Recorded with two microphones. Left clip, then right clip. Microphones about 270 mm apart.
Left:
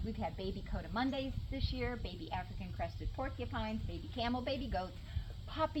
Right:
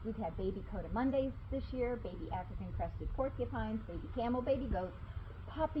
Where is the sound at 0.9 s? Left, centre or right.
Left.